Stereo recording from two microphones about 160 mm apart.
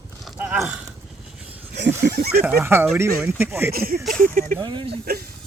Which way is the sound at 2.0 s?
75° right (ahead or behind).